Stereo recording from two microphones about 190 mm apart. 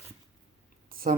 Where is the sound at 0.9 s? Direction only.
50° right (ahead or behind).